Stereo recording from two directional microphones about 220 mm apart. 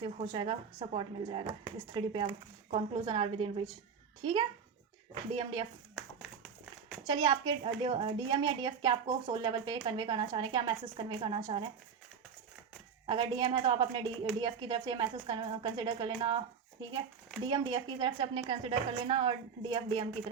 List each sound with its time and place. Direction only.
0.0 s a woman's voice: 20° right (ahead or behind)
7.1 s a woman's voice: 20° right (ahead or behind)
13.1 s a woman's voice: 20° right (ahead or behind)
17.4 s a woman's voice: 20° right (ahead or behind)